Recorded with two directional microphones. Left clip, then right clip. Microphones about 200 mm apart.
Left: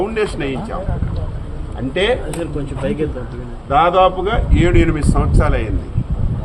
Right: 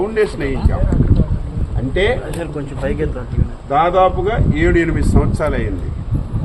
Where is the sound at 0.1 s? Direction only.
Centre (ahead or behind).